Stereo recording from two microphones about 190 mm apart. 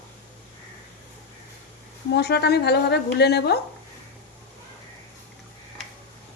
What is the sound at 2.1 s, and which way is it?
A woman's voice, 60° left (ahead or behind).